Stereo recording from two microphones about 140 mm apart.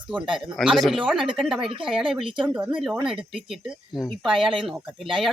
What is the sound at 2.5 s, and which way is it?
Speech, 5° right (ahead or behind).